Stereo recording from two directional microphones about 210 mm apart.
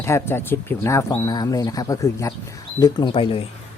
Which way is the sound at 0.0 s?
10° left (ahead or behind).